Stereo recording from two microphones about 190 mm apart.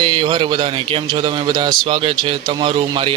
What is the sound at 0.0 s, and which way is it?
A man's voice, 25° right (ahead or behind).